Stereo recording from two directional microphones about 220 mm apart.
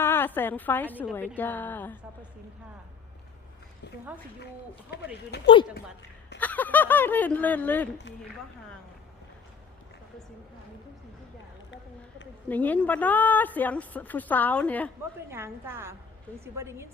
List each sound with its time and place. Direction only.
0.0 s a woman's voice: 10° left (ahead or behind)
4.9 s speech: 50° left (ahead or behind)
6.4 s a woman's voice: 5° left (ahead or behind)
12.5 s a woman's voice: 5° left (ahead or behind)
15.3 s a woman's voice: 10° right (ahead or behind)